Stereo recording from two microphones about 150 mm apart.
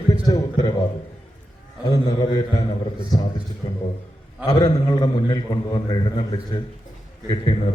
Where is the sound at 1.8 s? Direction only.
25° left (ahead or behind).